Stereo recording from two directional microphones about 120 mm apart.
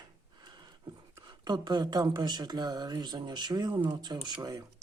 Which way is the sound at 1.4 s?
35° right (ahead or behind).